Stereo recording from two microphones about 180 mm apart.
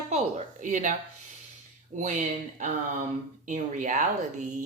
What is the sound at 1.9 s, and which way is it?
Speech, 40° right (ahead or behind).